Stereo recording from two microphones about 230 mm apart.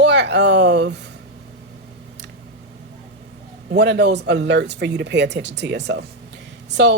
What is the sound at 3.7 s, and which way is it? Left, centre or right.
A woman's voice, right.